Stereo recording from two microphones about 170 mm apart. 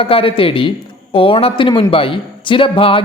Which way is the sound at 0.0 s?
35° left (ahead or behind).